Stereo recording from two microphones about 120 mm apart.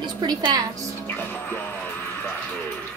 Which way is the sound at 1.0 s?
15° left (ahead or behind).